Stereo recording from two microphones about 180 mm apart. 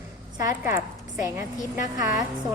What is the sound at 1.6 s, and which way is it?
Speech, 45° left (ahead or behind).